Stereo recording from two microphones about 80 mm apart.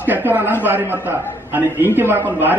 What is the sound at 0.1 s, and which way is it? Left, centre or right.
A man's voice, right.